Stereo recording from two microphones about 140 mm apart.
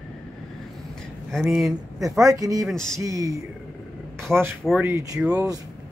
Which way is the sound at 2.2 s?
25° right (ahead or behind).